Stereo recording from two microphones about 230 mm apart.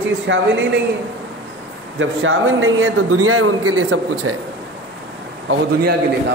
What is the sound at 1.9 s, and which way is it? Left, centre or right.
A man's voice, right.